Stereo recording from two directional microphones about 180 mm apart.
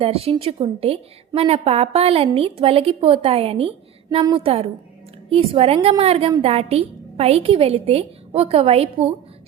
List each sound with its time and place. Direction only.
0.0 s a woman's voice: 30° right (ahead or behind)